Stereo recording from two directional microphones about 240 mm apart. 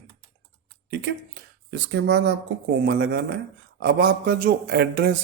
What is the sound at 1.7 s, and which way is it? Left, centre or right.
Speech, right.